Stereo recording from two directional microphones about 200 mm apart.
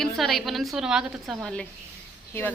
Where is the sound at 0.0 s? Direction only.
Centre (ahead or behind).